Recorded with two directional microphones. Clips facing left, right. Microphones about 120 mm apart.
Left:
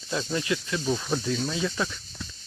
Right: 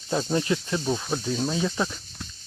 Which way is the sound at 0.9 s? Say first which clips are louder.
Left 2 dB; 15° right (ahead or behind).